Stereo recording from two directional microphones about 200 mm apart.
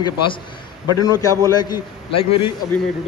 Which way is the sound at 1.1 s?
15° right (ahead or behind).